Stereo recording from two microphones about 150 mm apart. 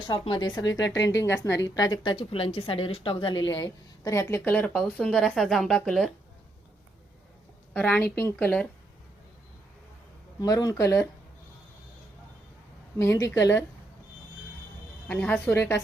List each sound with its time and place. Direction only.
0.1 s a woman's voice: 30° left (ahead or behind); by 6.1 s 5° left (ahead or behind)
7.7 s a woman's voice: 10° left (ahead or behind)
10.4 s a woman's voice: 25° left (ahead or behind)
13.0 s a woman's voice: 20° left (ahead or behind)
15.0 s a woman's voice: 10° left (ahead or behind)